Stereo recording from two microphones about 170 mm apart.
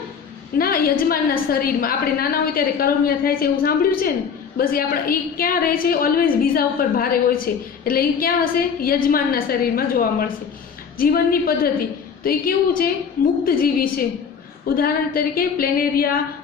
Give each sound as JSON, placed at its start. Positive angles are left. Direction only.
{"t": 0.6, "sound": "a woman's voice", "side_deg": 60}